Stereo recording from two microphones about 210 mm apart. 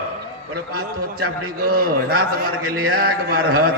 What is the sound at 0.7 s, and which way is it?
A man's voice, 45° right (ahead or behind).